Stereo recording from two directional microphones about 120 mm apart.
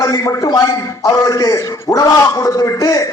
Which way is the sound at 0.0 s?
30° left (ahead or behind).